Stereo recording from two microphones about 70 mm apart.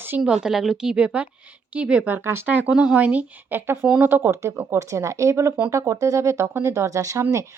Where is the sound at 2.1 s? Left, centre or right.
Right.